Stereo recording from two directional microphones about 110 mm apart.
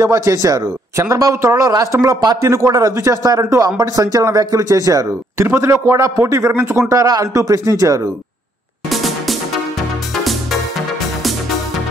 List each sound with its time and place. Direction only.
0.0 s speech: 30° right (ahead or behind)
6.9 s a man's voice: 30° right (ahead or behind)
8.9 s music: centre (ahead or behind)